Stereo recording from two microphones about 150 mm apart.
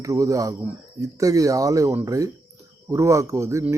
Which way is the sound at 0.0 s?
20° right (ahead or behind).